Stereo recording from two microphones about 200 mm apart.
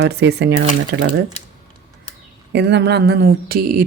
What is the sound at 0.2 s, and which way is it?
Speech, 55° right (ahead or behind).